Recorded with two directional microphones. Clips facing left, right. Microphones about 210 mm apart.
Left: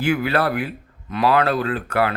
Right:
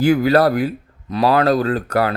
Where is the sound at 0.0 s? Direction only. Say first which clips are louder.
Right 6 dB; 40° right (ahead or behind).